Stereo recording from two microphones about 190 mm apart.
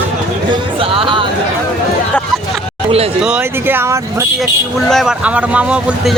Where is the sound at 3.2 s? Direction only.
5° right (ahead or behind).